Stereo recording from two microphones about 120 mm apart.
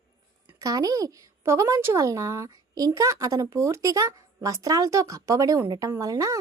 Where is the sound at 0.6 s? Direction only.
30° right (ahead or behind).